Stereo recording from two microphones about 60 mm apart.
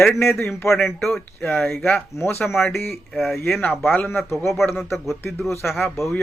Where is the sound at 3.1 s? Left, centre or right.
Centre.